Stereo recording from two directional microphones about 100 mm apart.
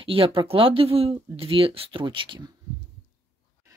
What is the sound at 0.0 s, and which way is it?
Speech, 60° right (ahead or behind).